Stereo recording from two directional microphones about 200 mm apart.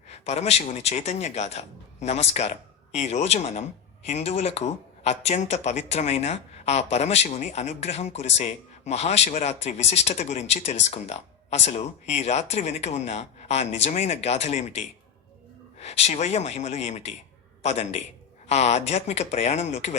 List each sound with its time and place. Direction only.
0.1 s a man's voice: 30° left (ahead or behind)